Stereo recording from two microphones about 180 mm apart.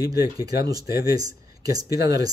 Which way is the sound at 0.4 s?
20° right (ahead or behind).